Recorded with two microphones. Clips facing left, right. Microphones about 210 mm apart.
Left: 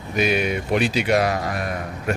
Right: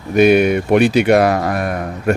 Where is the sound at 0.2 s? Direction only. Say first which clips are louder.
Right 10 dB; 55° right (ahead or behind).